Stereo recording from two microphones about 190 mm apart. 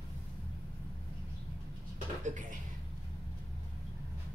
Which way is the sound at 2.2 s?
40° right (ahead or behind).